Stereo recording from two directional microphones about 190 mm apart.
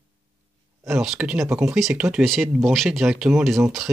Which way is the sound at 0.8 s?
Centre (ahead or behind).